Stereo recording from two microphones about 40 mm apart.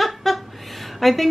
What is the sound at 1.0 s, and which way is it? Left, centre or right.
Speech, centre.